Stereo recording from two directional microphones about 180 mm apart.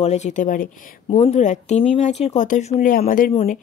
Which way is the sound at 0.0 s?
40° left (ahead or behind).